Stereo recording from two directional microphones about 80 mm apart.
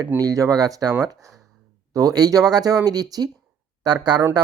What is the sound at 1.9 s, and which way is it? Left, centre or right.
Speech, right.